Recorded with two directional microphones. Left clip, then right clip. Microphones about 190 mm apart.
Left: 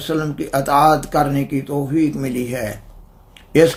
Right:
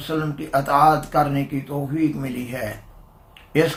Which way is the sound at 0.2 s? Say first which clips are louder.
Left 2 dB; 50° left (ahead or behind).